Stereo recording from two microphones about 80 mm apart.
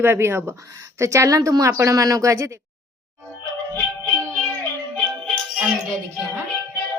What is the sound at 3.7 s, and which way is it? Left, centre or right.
Music, centre.